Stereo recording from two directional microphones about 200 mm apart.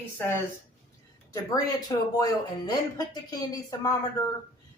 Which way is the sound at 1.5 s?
20° left (ahead or behind).